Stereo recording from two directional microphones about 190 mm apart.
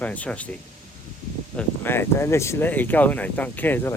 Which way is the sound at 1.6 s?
10° left (ahead or behind).